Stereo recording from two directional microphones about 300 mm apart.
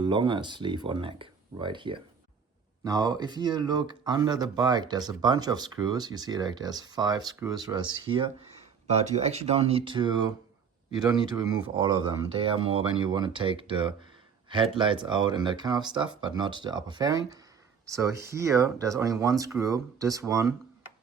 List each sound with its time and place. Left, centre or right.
0.0 s speech: centre